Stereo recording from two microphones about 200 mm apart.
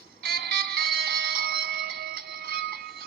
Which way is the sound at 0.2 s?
50° right (ahead or behind).